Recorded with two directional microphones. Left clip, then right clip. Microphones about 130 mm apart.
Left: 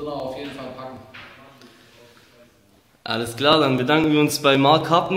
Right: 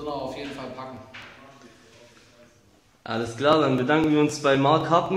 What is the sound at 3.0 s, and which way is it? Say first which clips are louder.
Speech: left 3 dB; 10° left (ahead or behind).